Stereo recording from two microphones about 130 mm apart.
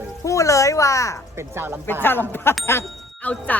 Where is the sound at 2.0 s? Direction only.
15° left (ahead or behind).